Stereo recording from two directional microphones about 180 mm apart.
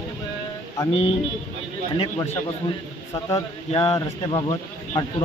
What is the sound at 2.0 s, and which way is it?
Speech, 20° left (ahead or behind).